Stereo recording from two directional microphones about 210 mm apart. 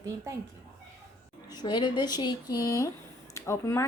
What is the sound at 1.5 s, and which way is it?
Speech, 20° left (ahead or behind).